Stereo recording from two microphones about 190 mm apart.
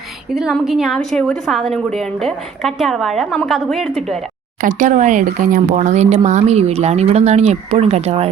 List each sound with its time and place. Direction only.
0.3 s a woman's voice: centre (ahead or behind)
4.6 s speech: 45° right (ahead or behind)